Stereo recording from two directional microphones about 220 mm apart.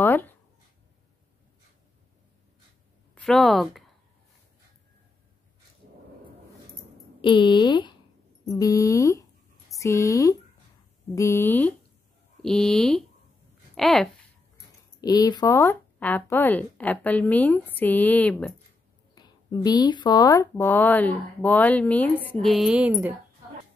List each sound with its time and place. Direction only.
0.0 s a sound: 10° left (ahead or behind)
3.2 s speech: centre (ahead or behind)
7.2 s speech: 20° left (ahead or behind); by 14.0 s centre (ahead or behind)
15.0 s speech: 15° left (ahead or behind)
19.1 s speech: 20° left (ahead or behind); by 23.1 s 5° right (ahead or behind)